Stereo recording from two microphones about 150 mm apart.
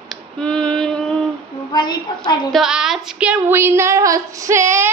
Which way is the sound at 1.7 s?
30° left (ahead or behind).